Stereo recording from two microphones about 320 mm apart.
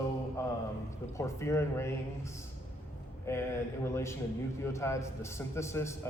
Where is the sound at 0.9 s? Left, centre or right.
Centre.